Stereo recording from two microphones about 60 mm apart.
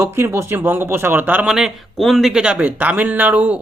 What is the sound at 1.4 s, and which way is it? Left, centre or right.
Speech, centre.